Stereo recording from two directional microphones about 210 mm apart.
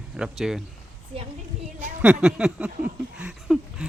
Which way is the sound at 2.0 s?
5° right (ahead or behind).